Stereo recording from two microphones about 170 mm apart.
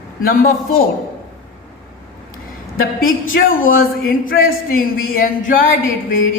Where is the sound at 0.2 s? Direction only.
55° left (ahead or behind).